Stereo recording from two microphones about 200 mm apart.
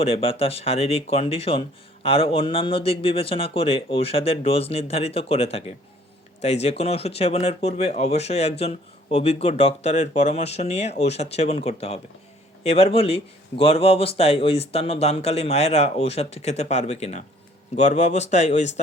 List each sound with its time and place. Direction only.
0.0 s speech: 30° left (ahead or behind)